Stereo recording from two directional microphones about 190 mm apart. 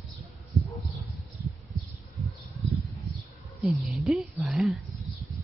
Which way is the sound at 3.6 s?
Centre (ahead or behind).